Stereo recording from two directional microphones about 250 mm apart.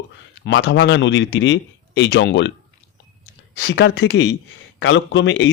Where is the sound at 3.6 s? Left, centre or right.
Left.